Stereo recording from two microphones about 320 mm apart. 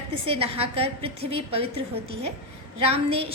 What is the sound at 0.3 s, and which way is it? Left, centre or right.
Speech, centre.